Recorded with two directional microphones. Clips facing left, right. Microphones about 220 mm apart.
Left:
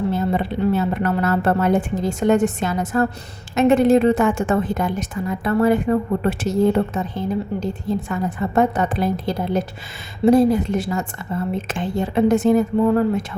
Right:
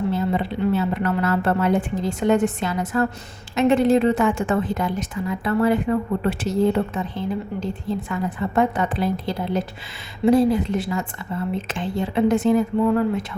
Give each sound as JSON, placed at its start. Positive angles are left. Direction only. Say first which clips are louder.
{"t": 0.1, "sound": "a woman's voice", "louder": "left 2 dB", "side_deg": 45}